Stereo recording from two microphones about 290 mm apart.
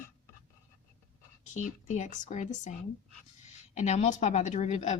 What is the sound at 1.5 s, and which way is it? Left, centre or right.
Speech, left.